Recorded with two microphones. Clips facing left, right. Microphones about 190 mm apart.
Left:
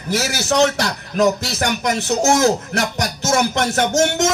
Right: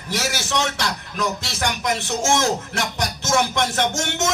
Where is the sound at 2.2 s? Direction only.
40° left (ahead or behind).